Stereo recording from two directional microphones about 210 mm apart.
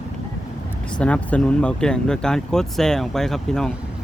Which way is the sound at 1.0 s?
5° left (ahead or behind).